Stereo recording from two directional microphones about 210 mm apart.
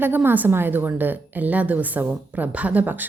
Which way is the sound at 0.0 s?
10° right (ahead or behind).